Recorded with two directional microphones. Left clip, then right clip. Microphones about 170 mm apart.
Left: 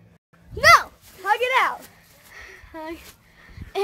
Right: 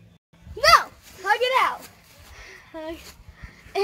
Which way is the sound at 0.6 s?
10° right (ahead or behind).